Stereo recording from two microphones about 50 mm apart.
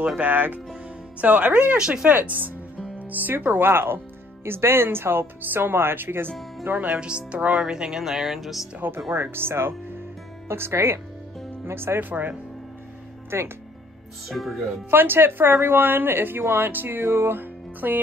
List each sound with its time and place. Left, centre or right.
0.2 s speech: right
1.8 s music: centre
2.1 s speech: right
6.7 s speech: right
7.0 s music: right; by 8.6 s centre
9.1 s speech: right
12.0 s speech: right
13.3 s speech: right
14.3 s speech: centre
14.9 s speech: right